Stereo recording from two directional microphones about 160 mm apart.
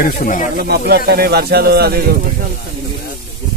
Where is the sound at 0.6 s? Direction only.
80° right.